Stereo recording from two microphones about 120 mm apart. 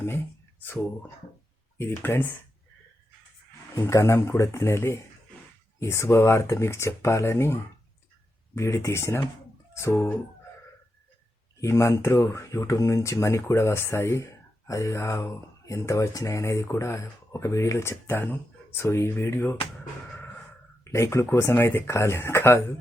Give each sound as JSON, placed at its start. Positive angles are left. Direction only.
{"t": 1.8, "sound": "speech", "side_deg": 20}
{"t": 3.8, "sound": "speech", "side_deg": 25}
{"t": 11.6, "sound": "speech", "side_deg": 25}
{"t": 20.9, "sound": "speech", "side_deg": 25}